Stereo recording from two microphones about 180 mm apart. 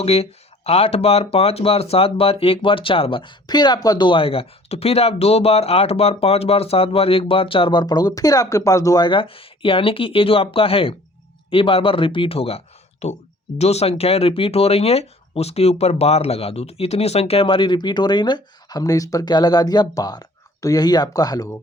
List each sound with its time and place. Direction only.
0.0 s speech: 35° left (ahead or behind)